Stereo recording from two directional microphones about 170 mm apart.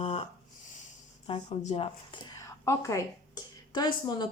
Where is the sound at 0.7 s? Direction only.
45° left (ahead or behind).